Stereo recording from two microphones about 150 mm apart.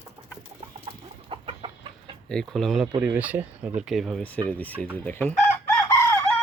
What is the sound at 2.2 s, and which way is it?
Speech, 5° left (ahead or behind).